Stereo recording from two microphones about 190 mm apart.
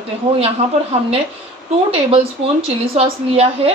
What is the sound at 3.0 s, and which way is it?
Speech, 30° right (ahead or behind).